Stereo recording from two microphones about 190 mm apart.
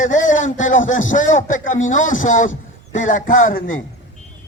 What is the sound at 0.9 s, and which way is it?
Speech, 90° left.